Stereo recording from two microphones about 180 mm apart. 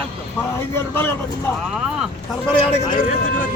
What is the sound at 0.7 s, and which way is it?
Speech, 10° left (ahead or behind).